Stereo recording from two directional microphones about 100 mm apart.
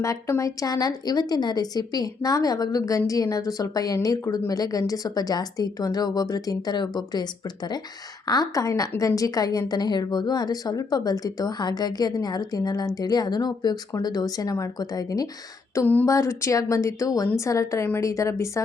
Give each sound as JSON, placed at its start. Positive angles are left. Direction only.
{"t": 0.0, "sound": "a woman's voice", "side_deg": 30}
{"t": 8.3, "sound": "a woman's voice", "side_deg": 40}